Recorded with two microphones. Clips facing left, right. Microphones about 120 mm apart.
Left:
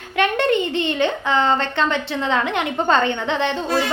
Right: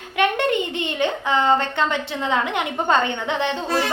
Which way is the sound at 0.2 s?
15° right (ahead or behind).